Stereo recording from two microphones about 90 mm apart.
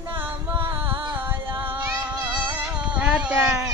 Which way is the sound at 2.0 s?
55° right (ahead or behind).